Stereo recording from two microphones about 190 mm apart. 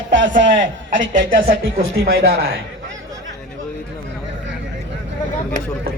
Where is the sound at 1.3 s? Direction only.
50° right (ahead or behind).